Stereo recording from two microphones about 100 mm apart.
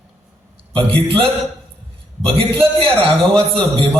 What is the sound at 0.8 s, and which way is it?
A man's voice, 65° right (ahead or behind).